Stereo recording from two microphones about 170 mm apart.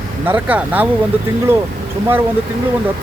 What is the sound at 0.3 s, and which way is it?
Speech, 10° right (ahead or behind).